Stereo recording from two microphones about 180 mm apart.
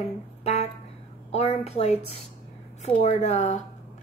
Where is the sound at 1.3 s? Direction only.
35° left (ahead or behind).